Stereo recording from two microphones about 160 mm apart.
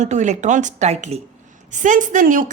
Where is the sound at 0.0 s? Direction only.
50° right (ahead or behind).